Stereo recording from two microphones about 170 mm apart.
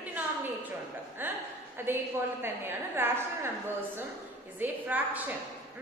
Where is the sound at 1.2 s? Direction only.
10° right (ahead or behind).